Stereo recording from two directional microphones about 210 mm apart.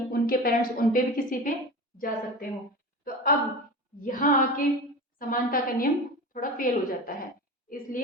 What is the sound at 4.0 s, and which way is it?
A woman's voice, 40° left (ahead or behind).